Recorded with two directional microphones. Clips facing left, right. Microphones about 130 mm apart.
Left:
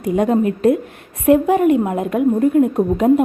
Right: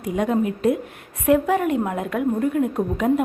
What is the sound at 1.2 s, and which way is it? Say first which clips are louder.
A woman's voice: left 5 dB; 20° left (ahead or behind).